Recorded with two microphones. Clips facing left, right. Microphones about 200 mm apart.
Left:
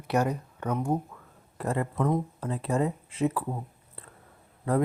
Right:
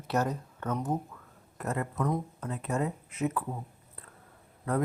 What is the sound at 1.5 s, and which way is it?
Speech, 30° left (ahead or behind).